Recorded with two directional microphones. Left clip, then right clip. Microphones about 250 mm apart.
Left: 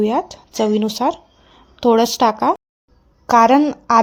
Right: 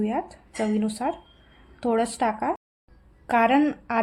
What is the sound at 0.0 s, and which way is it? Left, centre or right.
A woman's voice, left.